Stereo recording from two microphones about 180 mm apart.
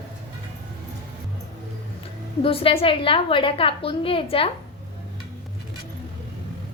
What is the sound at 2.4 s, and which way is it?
A woman's voice, 30° left (ahead or behind).